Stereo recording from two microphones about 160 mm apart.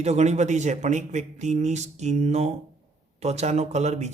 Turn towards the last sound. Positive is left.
turn(degrees=-45)  # may be behind; listen again after turning